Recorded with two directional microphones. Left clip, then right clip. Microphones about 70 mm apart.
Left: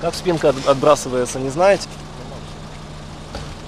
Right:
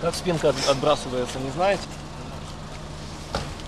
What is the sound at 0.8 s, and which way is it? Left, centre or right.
Speech, left.